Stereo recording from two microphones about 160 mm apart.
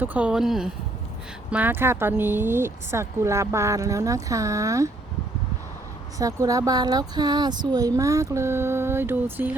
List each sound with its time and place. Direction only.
0.0 s speech: 10° right (ahead or behind)
6.1 s speech: 20° right (ahead or behind)